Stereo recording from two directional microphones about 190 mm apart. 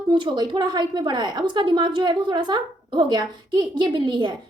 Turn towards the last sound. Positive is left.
turn(degrees=-25)  # may be behind; listen again after turning